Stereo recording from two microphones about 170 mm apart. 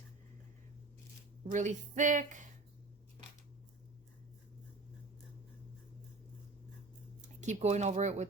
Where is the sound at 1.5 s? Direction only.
45° right (ahead or behind).